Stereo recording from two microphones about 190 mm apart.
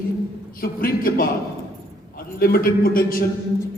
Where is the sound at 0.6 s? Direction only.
50° left (ahead or behind).